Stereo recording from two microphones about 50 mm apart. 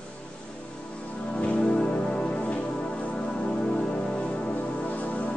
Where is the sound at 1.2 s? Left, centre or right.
Left.